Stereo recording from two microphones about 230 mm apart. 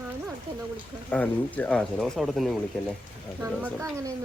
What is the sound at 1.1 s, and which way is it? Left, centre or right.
Speech, centre.